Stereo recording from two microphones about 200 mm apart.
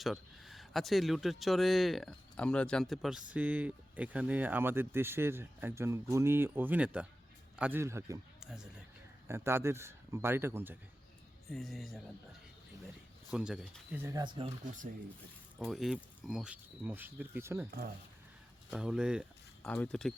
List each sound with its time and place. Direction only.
0.0 s speech: centre (ahead or behind)
8.4 s a sound: 5° right (ahead or behind)
9.2 s speech: 15° right (ahead or behind)
11.4 s speech: centre (ahead or behind)
13.3 s speech: 5° right (ahead or behind); by 14.5 s 25° right (ahead or behind)
15.5 s speech: centre (ahead or behind)
18.7 s speech: 5° right (ahead or behind)
19.6 s speech: 5° left (ahead or behind)